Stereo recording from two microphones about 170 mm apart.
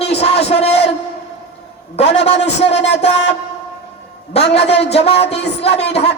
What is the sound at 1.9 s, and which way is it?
Music, 40° left (ahead or behind).